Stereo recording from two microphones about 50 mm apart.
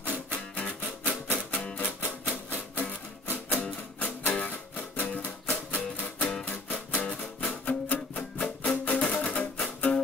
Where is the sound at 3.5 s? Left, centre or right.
Left.